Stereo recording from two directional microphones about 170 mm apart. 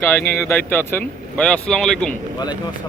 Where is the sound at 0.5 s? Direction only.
10° left (ahead or behind).